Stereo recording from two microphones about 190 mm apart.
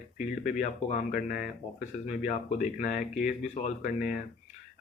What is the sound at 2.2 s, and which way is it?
Speech, 40° left (ahead or behind).